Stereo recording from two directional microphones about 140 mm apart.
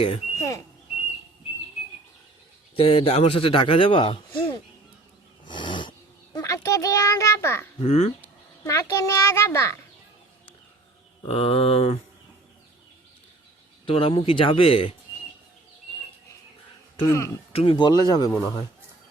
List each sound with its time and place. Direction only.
0.3 s speech: 20° left (ahead or behind)
2.7 s a man's voice: 45° left (ahead or behind)
5.5 s gasp: 35° left (ahead or behind)
6.3 s a child's voice: 25° left (ahead or behind)
7.8 s speech: 45° left (ahead or behind)
8.6 s a child's voice: 25° left (ahead or behind)
11.2 s a man's voice: 40° left (ahead or behind)
13.8 s a man's voice: 40° left (ahead or behind)
17.1 s a child's voice: 20° left (ahead or behind)
17.5 s a man's voice: 40° left (ahead or behind)